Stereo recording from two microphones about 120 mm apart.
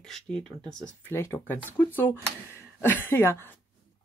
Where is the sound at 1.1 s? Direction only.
20° left (ahead or behind).